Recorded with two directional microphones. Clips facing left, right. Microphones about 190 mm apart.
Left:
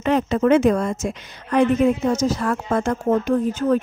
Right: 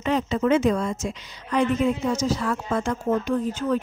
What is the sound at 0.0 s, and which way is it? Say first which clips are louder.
A woman's voice: left 4 dB; 55° left (ahead or behind).